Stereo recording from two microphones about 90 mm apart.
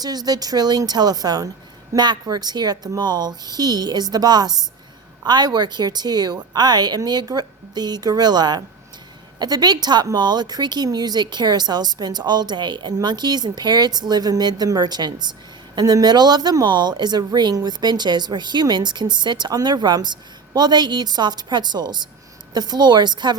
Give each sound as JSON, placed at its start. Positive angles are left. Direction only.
{"t": 0.0, "sound": "a woman's voice", "side_deg": -45}